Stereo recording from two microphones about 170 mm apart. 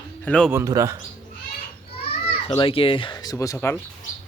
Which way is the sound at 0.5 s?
20° right (ahead or behind).